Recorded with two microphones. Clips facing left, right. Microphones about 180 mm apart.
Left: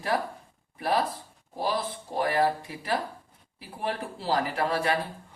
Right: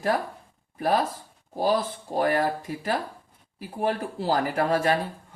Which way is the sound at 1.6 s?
45° right (ahead or behind).